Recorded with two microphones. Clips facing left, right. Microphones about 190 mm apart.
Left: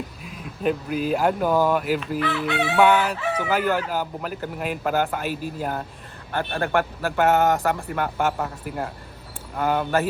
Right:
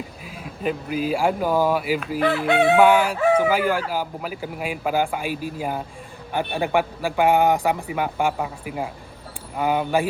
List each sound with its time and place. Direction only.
0.3 s speech: centre (ahead or behind)
2.1 s chicken: 50° right (ahead or behind)
2.7 s speech: 10° right (ahead or behind)